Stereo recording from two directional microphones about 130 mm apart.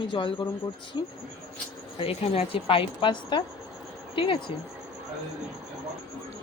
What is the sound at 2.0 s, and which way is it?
Speech, 45° left (ahead or behind).